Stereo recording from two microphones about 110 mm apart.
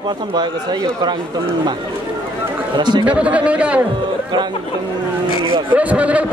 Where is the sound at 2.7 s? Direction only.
45° right (ahead or behind).